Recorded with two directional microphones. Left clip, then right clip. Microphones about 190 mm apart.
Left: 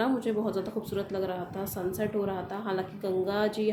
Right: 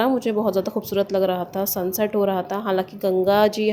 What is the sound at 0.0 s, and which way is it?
Speech, 35° right (ahead or behind).